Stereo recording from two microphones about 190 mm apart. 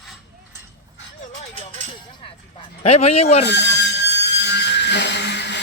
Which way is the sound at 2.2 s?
30° left (ahead or behind).